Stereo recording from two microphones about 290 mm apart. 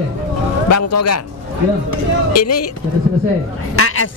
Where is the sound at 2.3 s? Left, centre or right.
Left.